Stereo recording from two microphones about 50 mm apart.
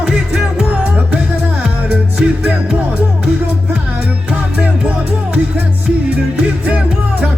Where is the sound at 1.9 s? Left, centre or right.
Right.